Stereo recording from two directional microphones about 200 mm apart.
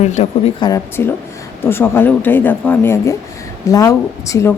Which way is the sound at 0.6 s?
15° left (ahead or behind).